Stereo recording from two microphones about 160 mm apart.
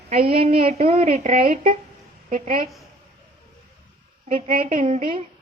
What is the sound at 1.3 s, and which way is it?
Speech, 60° right (ahead or behind).